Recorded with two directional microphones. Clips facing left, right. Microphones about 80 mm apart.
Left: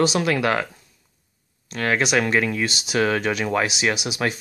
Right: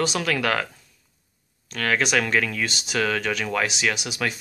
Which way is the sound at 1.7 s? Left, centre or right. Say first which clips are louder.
Left 2 dB; centre.